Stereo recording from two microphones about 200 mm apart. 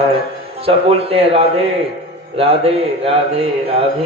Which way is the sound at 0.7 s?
30° right (ahead or behind).